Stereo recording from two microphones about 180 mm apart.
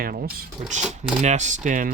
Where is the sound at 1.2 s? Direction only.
40° right (ahead or behind).